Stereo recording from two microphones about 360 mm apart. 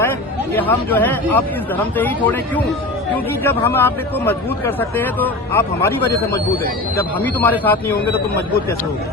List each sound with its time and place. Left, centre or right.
0.5 s speech: centre
3.4 s speech: centre
7.2 s speech: centre